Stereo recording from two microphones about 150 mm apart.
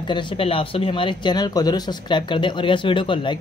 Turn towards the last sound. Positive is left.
turn(degrees=35)  # may be behind; listen again after turning